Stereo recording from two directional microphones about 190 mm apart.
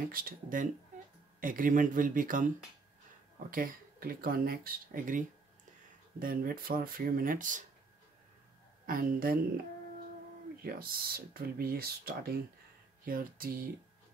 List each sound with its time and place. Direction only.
0.1 s speech: 50° right (ahead or behind)
3.4 s speech: 50° right (ahead or behind)
8.8 s speech: 50° right (ahead or behind)
10.6 s speech: 50° right (ahead or behind)